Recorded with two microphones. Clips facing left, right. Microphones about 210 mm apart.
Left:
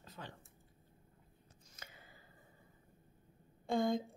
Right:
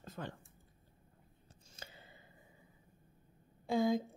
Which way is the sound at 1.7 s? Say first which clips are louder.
Right 3 dB; 30° right (ahead or behind).